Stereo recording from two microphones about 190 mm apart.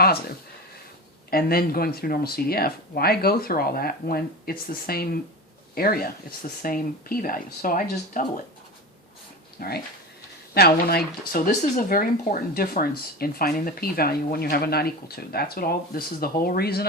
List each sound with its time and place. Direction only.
1.3 s speech: 55° left (ahead or behind)
9.6 s speech: 55° left (ahead or behind)